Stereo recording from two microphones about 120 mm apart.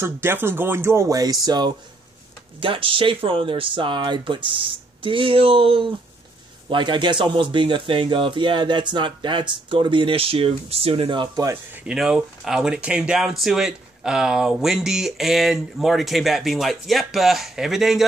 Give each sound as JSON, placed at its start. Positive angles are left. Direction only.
{"t": 0.0, "sound": "speech", "side_deg": -20}
{"t": 2.6, "sound": "speech", "side_deg": -45}
{"t": 11.8, "sound": "speech", "side_deg": -5}